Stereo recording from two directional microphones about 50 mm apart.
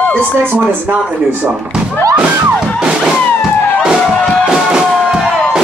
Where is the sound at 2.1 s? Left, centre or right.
Centre.